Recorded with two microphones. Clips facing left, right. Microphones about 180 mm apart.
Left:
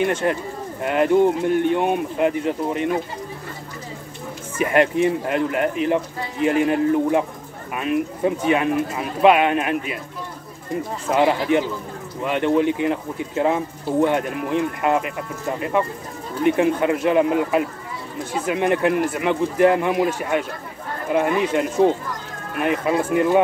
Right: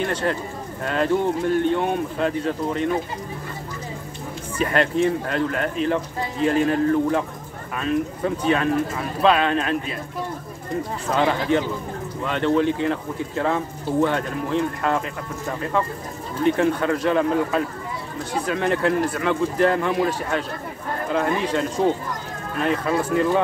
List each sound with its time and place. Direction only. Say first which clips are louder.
0.0 s speech: left 3 dB; 15° left (ahead or behind)
4.6 s speech: left 3 dB; 15° left (ahead or behind)
11.1 s speech: left 3 dB; 15° left (ahead or behind)
16.4 s speech: left 2 dB; 15° left (ahead or behind)